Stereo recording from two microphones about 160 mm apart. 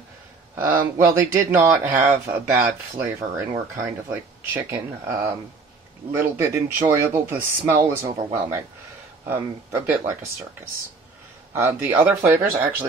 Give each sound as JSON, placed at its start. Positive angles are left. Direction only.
{"t": 0.9, "sound": "speech", "side_deg": -15}
{"t": 11.5, "sound": "speech", "side_deg": -15}